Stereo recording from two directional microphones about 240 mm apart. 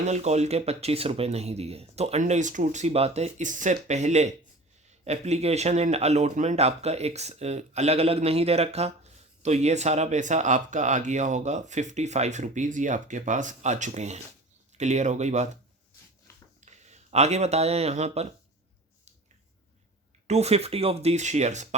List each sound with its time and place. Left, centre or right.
0.0 s speech: right
16.6 s speech: right
20.2 s speech: right